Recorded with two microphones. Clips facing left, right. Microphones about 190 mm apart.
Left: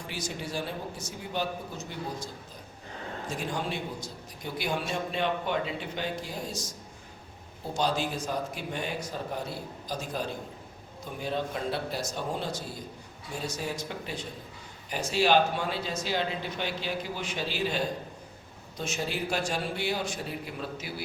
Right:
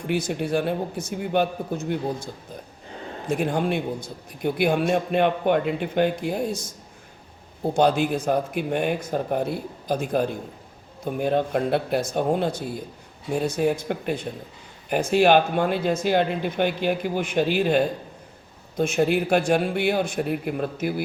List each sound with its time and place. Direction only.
0.1 s a man's voice: 60° right (ahead or behind)